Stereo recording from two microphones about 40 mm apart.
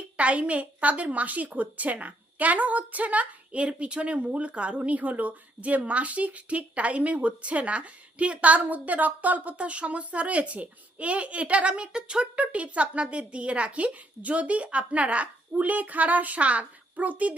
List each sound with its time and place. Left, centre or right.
0.2 s a woman's voice: right
12.4 s a woman's voice: right